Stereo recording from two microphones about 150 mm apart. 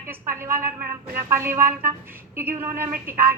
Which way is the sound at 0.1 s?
15° right (ahead or behind).